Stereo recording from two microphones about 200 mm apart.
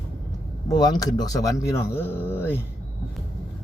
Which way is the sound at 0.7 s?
20° left (ahead or behind).